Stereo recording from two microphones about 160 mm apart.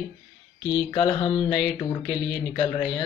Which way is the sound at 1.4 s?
Centre (ahead or behind).